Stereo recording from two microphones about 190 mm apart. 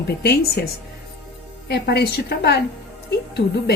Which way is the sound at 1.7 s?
60° left (ahead or behind).